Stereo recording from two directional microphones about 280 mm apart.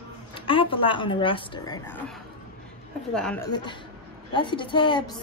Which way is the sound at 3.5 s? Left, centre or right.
Centre.